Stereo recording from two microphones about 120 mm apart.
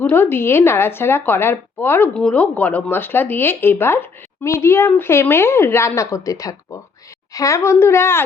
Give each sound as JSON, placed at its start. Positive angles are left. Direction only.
{"t": 0.0, "sound": "a woman's voice", "side_deg": 20}